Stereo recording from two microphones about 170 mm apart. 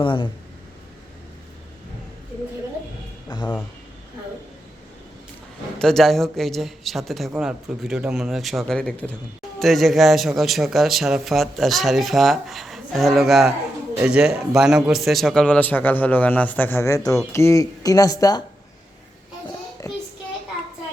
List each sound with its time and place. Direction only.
0.0 s speech: 30° left (ahead or behind)
5.8 s a man's voice: centre (ahead or behind); by 18.4 s 20° left (ahead or behind)
19.8 s child singing: 20° left (ahead or behind)